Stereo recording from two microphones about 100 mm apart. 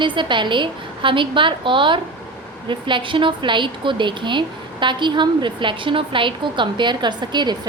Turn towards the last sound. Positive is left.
turn(degrees=-50)  # may be behind; listen again after turning